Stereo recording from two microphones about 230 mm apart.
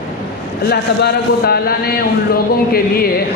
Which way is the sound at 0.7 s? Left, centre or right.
Left.